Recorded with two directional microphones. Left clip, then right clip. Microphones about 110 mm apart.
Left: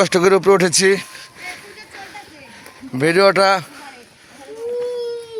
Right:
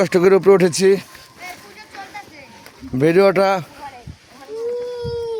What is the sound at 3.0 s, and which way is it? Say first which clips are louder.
Speech: left 1 dB; 90° right.